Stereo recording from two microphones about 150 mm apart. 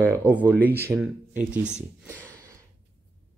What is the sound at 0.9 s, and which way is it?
Speech, 10° right (ahead or behind).